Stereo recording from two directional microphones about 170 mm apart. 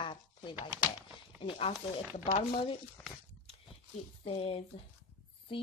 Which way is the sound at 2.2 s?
35° left (ahead or behind).